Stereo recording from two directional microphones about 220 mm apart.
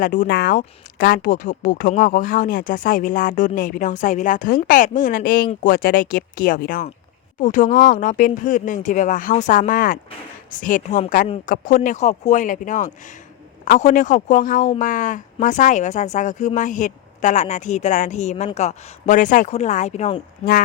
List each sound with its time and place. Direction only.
0.0 s speech: 35° left (ahead or behind)
20.4 s speech: 40° left (ahead or behind)